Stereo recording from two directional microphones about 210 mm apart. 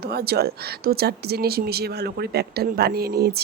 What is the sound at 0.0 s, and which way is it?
Speech, 50° right (ahead or behind).